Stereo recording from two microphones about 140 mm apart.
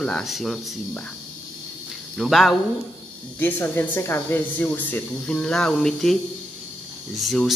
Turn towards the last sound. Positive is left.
turn(degrees=0)  # may be behind; listen again after turning